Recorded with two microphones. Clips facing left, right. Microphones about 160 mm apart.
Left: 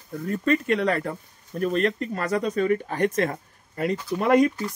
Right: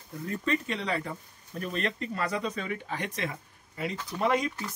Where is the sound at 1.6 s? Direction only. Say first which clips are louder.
Left 9 dB; 45° left (ahead or behind).